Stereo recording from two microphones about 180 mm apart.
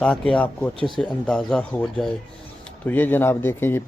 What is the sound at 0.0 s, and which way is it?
Speech, 5° left (ahead or behind).